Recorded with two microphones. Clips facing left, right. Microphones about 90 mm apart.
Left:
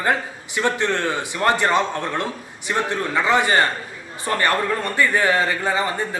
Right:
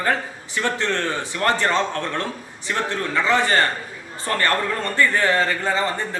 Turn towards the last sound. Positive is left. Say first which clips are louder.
# left 1 dB
turn(degrees=15)  # may be behind; listen again after turning